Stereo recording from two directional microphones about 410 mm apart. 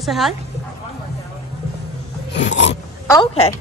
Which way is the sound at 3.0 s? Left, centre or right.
Centre.